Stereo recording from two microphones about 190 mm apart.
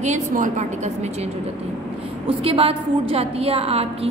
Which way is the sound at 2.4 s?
30° right (ahead or behind).